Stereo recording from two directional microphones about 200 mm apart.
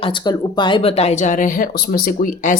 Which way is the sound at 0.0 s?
25° left (ahead or behind).